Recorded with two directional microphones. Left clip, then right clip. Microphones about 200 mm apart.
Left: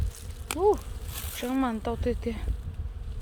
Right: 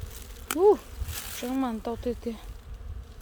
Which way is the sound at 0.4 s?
40° right (ahead or behind).